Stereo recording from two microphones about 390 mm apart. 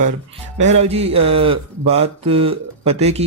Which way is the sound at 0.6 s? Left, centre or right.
Centre.